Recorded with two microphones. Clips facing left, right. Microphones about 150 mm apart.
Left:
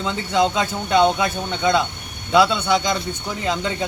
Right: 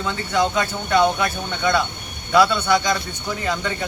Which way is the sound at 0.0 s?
20° left (ahead or behind).